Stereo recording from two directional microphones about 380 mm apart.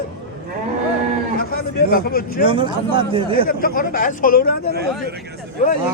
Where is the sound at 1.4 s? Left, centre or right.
Left.